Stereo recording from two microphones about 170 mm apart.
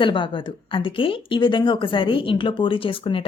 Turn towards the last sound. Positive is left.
turn(degrees=30)  # may be behind; listen again after turning